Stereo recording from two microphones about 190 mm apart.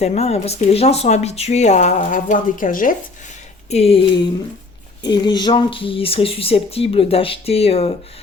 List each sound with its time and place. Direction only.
0.0 s speech: 35° left (ahead or behind)
3.7 s speech: 30° left (ahead or behind)
5.0 s speech: 20° left (ahead or behind)